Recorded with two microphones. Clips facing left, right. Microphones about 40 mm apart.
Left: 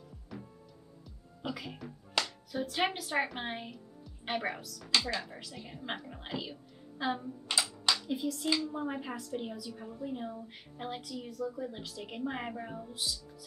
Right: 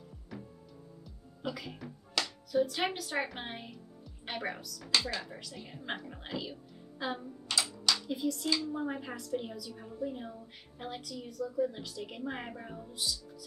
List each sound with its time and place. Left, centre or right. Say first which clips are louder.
1.0 s music: even; centre
3.3 s a woman's voice: left 3 dB; centre
7.5 s typing: even; centre
7.9 s a woman's voice: even; centre